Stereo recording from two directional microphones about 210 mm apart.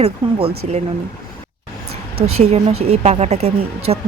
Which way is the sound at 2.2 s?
90° right.